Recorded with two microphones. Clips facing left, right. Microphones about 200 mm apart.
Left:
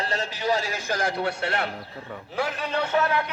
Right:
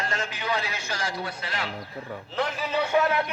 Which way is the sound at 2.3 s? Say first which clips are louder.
Even; centre (ahead or behind).